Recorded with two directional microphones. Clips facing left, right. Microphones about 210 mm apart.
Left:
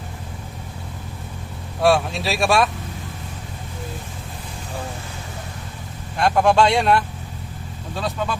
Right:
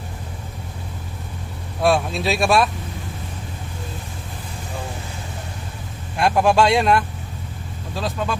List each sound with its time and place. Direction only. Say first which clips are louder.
1.8 s speech: left 1 dB; centre (ahead or behind)
6.1 s speech: even; 5° right (ahead or behind)